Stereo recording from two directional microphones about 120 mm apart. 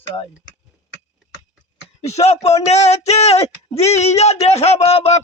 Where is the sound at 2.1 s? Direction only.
65° left (ahead or behind).